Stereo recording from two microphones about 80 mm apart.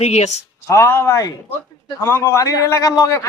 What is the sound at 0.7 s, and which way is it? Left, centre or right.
Speech, left.